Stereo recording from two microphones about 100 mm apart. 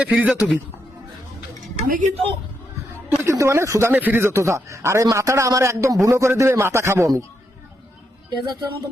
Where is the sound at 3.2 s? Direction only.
30° right (ahead or behind).